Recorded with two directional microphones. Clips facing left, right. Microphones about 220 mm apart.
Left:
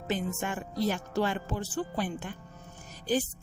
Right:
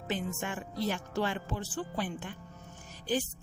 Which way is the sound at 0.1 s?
45° left (ahead or behind).